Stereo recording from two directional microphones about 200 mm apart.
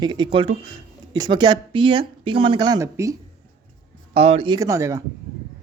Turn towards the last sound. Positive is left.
turn(degrees=-15)  # may be behind; listen again after turning